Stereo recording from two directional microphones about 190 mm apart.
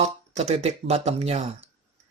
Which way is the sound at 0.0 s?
35° right (ahead or behind).